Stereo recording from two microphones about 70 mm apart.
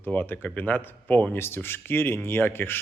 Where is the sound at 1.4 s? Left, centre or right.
Left.